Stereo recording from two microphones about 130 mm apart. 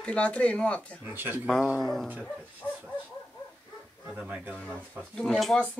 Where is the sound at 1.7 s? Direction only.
5° left (ahead or behind).